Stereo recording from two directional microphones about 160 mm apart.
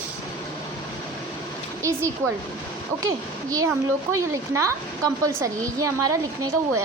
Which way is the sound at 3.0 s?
20° right (ahead or behind).